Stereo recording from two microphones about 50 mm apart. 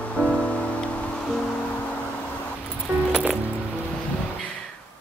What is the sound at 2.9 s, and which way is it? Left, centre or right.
Music, right.